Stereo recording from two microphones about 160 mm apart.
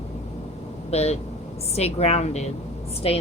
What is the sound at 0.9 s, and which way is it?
A woman's voice, 40° left (ahead or behind).